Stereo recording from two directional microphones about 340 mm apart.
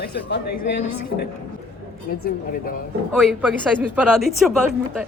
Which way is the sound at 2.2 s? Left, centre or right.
Left.